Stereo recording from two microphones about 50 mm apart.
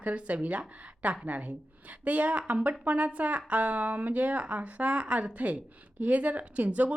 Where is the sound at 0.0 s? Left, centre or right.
Right.